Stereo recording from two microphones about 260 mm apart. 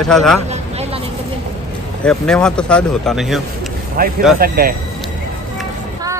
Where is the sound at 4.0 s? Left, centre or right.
Right.